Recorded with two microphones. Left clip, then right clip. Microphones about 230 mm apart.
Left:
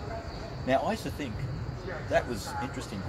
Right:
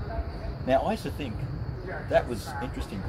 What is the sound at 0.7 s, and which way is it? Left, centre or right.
Speech, centre.